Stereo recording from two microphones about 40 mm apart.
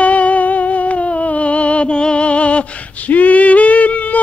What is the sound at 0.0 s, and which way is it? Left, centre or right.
Music, left.